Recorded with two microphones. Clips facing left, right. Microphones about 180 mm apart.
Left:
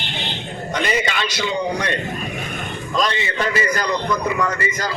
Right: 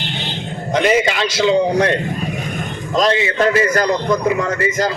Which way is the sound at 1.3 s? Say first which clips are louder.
Right 9 dB; 90° right.